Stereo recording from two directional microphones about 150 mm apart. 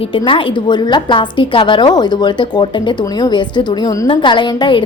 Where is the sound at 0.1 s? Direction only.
35° left (ahead or behind).